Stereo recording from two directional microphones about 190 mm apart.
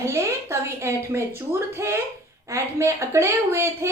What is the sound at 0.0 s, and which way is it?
A woman's voice, 15° right (ahead or behind).